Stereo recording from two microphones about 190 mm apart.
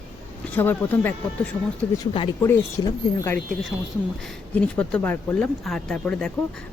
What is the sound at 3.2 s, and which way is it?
Speech, 10° left (ahead or behind).